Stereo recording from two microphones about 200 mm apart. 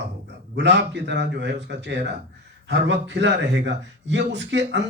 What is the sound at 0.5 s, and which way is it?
A man's voice, 60° right (ahead or behind).